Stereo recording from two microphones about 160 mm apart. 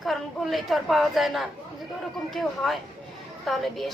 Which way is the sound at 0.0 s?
Centre (ahead or behind).